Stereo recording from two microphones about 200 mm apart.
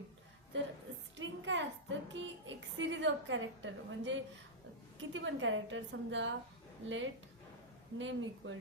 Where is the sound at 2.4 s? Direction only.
65° right (ahead or behind).